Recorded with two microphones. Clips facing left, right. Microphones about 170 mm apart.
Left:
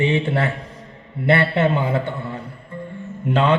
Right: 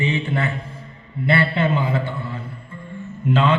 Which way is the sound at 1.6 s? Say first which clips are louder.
Left 2 dB; 55° left (ahead or behind).